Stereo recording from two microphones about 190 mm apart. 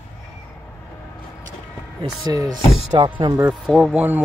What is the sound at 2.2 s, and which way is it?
Speech, 20° right (ahead or behind).